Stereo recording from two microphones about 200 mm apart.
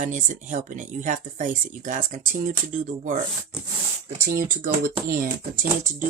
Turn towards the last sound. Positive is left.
turn(degrees=-45)  # may be behind; listen again after turning